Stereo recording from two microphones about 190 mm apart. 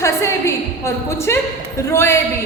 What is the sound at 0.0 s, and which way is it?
A woman's voice, 15° left (ahead or behind).